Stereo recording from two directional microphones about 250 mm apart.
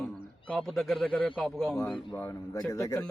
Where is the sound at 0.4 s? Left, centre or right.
Centre.